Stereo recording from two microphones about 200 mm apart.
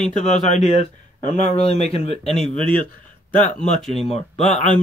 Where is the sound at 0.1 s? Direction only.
35° left (ahead or behind).